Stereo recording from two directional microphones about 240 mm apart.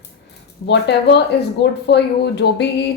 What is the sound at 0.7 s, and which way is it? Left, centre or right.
A woman's voice, left.